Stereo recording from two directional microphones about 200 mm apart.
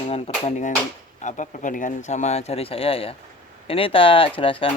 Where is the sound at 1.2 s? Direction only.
40° left (ahead or behind).